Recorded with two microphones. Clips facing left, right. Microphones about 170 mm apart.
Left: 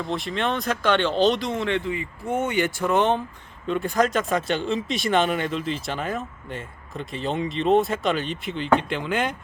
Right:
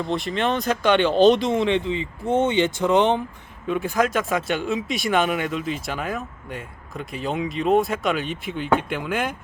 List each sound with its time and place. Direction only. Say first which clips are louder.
0.0 s speech: right 3 dB; centre (ahead or behind)
0.9 s speech: right 5 dB; 15° right (ahead or behind)
3.7 s speech: even; centre (ahead or behind)